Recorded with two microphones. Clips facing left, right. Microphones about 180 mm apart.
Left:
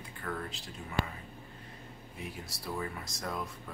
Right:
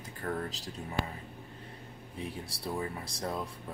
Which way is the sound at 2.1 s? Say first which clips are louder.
Right 4 dB; 30° right (ahead or behind).